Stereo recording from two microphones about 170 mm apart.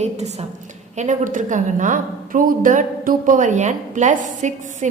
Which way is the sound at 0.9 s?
50° right (ahead or behind).